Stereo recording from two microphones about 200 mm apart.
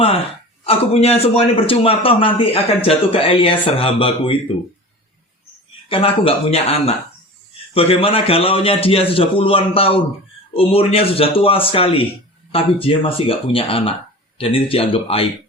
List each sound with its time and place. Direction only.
0.6 s a man's voice: 30° left (ahead or behind)
5.9 s a man's voice: 30° left (ahead or behind)